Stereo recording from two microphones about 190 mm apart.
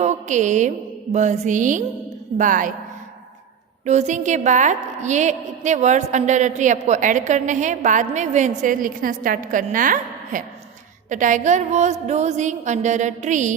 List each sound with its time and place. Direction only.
0.0 s music: 40° right (ahead or behind)
1.1 s a woman's voice: 40° right (ahead or behind)
3.8 s a woman's voice: 35° right (ahead or behind)